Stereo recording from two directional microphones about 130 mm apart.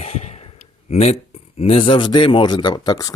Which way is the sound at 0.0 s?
55° left (ahead or behind).